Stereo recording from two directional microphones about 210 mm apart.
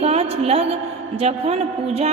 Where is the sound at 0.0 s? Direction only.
30° right (ahead or behind).